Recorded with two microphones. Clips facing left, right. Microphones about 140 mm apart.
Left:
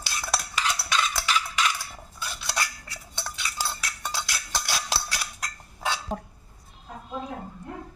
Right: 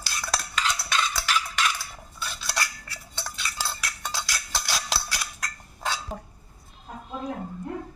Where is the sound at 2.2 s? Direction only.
15° left (ahead or behind).